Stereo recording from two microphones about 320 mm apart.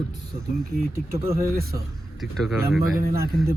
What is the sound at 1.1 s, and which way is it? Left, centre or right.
Speech, right.